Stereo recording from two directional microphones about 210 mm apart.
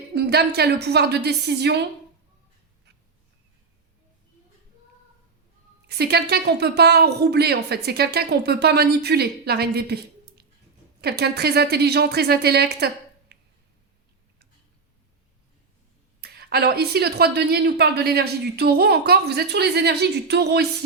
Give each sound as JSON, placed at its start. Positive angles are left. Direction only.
{"t": 0.1, "sound": "a woman's voice", "side_deg": -50}
{"t": 5.9, "sound": "a woman's voice", "side_deg": -50}
{"t": 16.2, "sound": "a woman's voice", "side_deg": -50}